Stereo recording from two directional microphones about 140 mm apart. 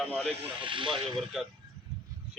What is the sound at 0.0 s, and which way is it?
Speech, 5° left (ahead or behind).